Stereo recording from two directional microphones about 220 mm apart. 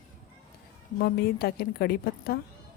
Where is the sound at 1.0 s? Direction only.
45° left (ahead or behind).